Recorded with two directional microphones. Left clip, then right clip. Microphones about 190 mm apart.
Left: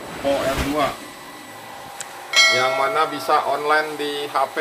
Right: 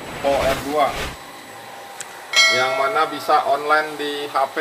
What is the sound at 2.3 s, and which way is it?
Speech, centre (ahead or behind).